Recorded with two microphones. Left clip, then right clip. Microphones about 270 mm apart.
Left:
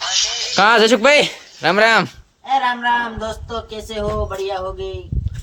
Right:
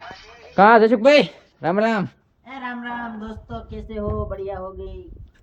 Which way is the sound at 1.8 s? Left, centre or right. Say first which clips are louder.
Left 9 dB; centre.